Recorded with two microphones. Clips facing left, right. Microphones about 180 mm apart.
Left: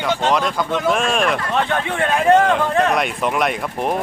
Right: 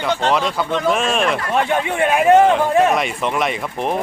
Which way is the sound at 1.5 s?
10° right (ahead or behind).